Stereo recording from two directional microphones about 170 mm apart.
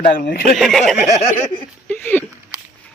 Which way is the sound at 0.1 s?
60° left (ahead or behind).